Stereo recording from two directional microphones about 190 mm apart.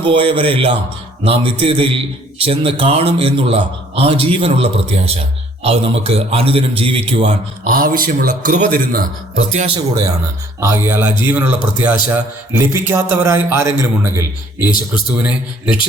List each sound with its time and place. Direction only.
0.0 s a man's voice: 25° right (ahead or behind)
9.7 s a man's voice: 20° right (ahead or behind); by 15.8 s 5° right (ahead or behind)